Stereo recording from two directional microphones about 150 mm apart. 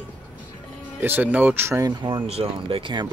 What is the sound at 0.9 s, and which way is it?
Speech, 15° right (ahead or behind).